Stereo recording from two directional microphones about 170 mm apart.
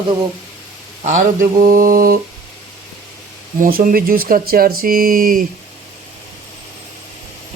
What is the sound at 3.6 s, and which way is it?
Speech, 55° right (ahead or behind).